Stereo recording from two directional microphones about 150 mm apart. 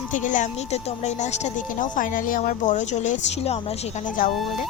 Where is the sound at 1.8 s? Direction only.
60° left (ahead or behind); by 3.6 s 45° left (ahead or behind).